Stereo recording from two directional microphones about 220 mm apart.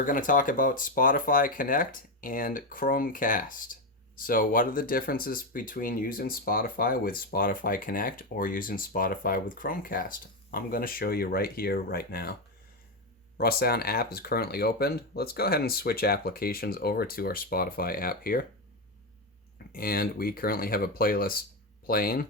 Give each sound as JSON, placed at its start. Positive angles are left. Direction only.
{"t": 0.0, "sound": "speech", "side_deg": 35}
{"t": 13.3, "sound": "speech", "side_deg": 45}
{"t": 19.7, "sound": "speech", "side_deg": 40}